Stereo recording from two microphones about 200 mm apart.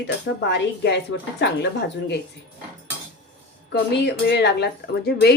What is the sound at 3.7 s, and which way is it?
Speech, 55° left (ahead or behind).